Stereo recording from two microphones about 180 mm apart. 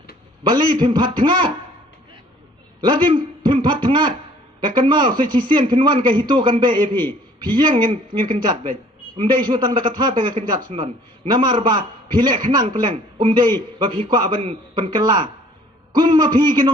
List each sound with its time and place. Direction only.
0.4 s a man's voice: 25° right (ahead or behind)
2.8 s a man's voice: 25° right (ahead or behind)